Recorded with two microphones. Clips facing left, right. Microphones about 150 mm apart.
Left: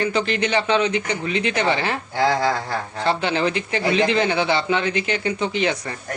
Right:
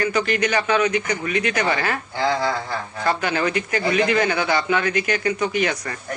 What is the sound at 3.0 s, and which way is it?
Speech, 25° left (ahead or behind).